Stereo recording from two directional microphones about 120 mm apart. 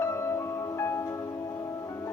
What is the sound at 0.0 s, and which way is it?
Music, 25° left (ahead or behind).